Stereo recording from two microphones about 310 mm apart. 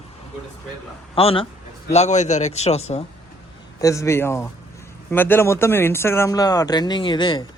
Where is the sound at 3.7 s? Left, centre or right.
Centre.